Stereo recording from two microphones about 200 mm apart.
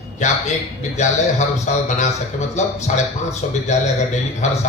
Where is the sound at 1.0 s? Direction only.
35° left (ahead or behind).